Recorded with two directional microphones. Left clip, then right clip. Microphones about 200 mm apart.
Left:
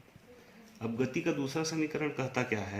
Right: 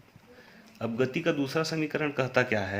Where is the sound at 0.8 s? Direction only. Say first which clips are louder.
Right 5 dB; 40° right (ahead or behind).